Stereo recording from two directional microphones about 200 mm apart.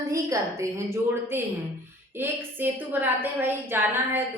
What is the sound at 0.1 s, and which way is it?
A woman's voice, 15° right (ahead or behind).